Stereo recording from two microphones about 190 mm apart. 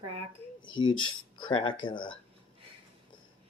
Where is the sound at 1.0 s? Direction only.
25° left (ahead or behind).